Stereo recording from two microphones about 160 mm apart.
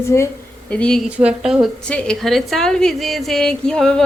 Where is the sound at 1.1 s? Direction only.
5° right (ahead or behind).